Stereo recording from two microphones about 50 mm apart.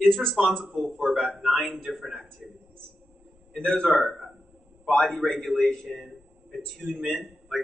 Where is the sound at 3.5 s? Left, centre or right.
Centre.